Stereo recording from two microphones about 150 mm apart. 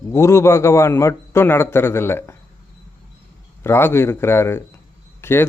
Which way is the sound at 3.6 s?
15° left (ahead or behind).